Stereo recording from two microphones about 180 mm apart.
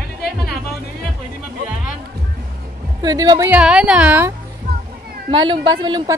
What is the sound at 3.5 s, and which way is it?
Speech, 5° right (ahead or behind).